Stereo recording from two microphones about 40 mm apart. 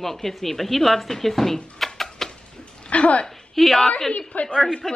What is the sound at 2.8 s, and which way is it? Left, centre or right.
Speech, left.